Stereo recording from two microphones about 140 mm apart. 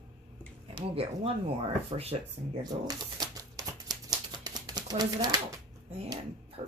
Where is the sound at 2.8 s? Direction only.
25° right (ahead or behind).